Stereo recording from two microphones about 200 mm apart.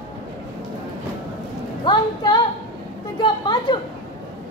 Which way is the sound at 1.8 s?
20° left (ahead or behind).